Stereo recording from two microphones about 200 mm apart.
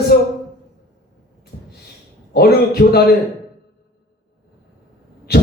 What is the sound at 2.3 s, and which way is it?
Speech, 50° left (ahead or behind).